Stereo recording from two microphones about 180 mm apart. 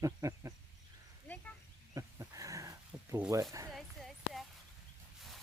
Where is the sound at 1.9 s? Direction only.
15° right (ahead or behind).